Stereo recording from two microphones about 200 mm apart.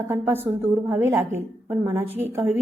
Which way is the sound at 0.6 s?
10° right (ahead or behind).